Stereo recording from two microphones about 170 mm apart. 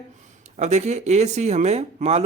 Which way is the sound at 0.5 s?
45° right (ahead or behind).